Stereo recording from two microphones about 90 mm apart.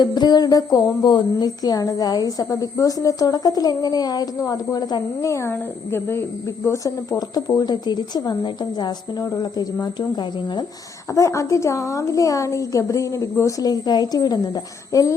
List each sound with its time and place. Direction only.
0.0 s a woman's voice: 50° left (ahead or behind)
1.0 s a woman's voice: 55° left (ahead or behind)
5.2 s a woman's voice: 35° left (ahead or behind); by 10.7 s 55° left (ahead or behind)
11.1 s a woman's voice: 35° left (ahead or behind)